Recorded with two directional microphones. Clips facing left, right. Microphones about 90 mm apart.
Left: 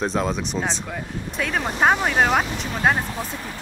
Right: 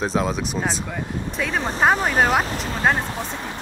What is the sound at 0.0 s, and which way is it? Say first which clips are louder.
Speech: right 1 dB; centre (ahead or behind).